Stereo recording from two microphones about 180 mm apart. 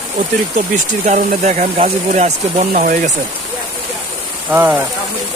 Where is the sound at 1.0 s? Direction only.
45° right (ahead or behind).